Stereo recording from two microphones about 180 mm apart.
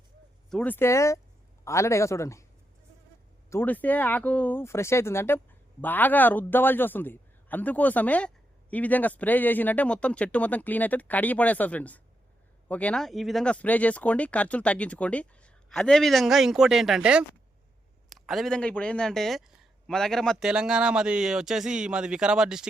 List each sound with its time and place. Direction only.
0.5 s speech: 10° left (ahead or behind)
3.5 s speech: 10° left (ahead or behind)